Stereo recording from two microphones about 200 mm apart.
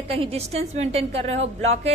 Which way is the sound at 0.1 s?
30° right (ahead or behind).